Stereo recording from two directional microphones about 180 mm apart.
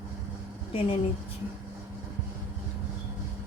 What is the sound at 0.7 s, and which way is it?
Speech, 30° left (ahead or behind).